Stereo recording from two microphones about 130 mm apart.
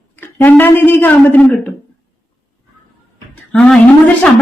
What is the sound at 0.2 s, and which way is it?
A woman's voice, 15° left (ahead or behind).